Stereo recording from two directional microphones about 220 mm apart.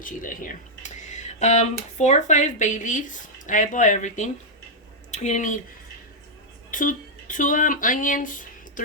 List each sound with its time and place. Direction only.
0.0 s a sound: 35° left (ahead or behind)
2.0 s speech: 30° left (ahead or behind)
6.7 s speech: 35° left (ahead or behind)